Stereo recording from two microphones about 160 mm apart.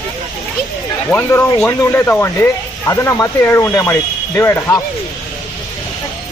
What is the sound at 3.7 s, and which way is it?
Speech, 25° left (ahead or behind).